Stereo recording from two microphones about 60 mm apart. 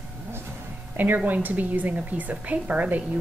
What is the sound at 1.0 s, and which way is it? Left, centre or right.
A woman's voice, right.